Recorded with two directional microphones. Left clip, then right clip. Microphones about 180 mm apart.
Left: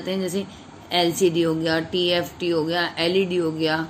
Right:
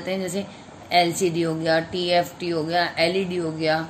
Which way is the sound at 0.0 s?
10° left (ahead or behind).